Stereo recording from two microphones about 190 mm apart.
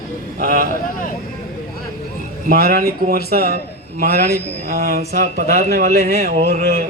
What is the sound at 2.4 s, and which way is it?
Speech, 50° right (ahead or behind).